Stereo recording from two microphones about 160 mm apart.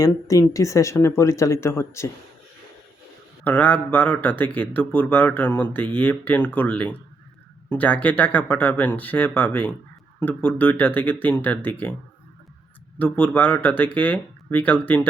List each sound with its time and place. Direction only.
0.0 s speech: 20° left (ahead or behind)
3.4 s a man's voice: 10° left (ahead or behind)
13.0 s a man's voice: 10° left (ahead or behind)